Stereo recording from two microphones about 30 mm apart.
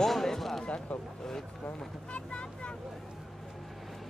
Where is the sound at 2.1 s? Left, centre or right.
Left.